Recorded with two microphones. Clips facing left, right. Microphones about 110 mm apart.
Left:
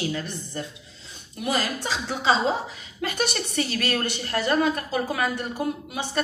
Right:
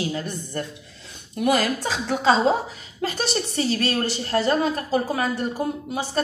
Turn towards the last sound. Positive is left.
turn(degrees=-35)  # may be behind; listen again after turning